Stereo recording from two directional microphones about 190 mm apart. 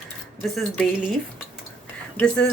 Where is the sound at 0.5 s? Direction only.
Centre (ahead or behind).